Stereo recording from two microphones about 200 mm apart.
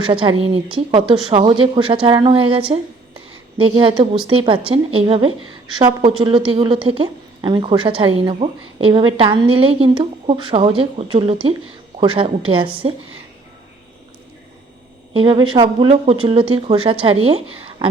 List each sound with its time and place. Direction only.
0.0 s a woman's voice: 25° right (ahead or behind)
15.1 s a woman's voice: 25° right (ahead or behind)